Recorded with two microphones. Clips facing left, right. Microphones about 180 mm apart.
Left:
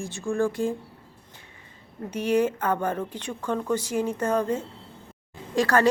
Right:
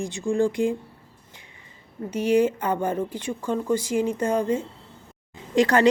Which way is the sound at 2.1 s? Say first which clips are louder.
Right 3 dB; 10° right (ahead or behind).